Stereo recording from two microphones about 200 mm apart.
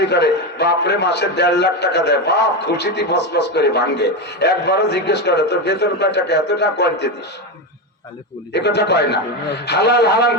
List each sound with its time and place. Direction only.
0.0 s a man's voice: 55° left (ahead or behind)
8.5 s a man's voice: 55° left (ahead or behind)